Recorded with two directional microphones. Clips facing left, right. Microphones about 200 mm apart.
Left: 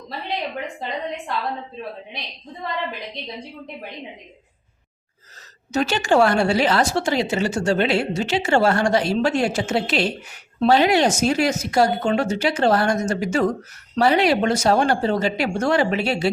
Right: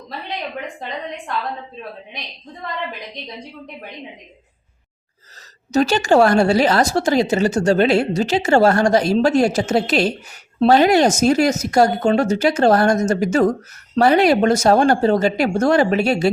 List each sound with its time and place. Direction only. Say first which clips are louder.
5.7 s a woman's voice: right 4 dB; 40° right (ahead or behind)